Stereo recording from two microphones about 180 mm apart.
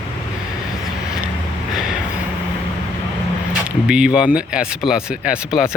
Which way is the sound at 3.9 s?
5° right (ahead or behind).